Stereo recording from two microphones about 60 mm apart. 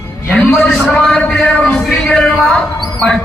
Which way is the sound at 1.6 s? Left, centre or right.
Centre.